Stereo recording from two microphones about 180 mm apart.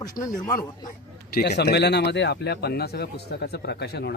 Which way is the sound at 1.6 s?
65° left (ahead or behind).